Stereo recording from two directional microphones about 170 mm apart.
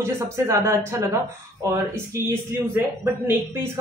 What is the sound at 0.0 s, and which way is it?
Speech, 15° right (ahead or behind).